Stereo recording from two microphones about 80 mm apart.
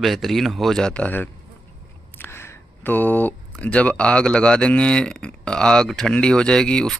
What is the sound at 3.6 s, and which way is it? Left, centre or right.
Speech, centre.